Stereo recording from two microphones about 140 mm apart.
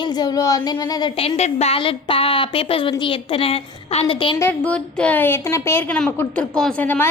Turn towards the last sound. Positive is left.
turn(degrees=10)  # may be behind; listen again after turning